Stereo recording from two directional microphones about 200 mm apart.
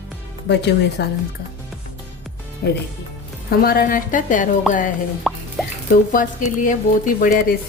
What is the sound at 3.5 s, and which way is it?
Speech, 50° left (ahead or behind).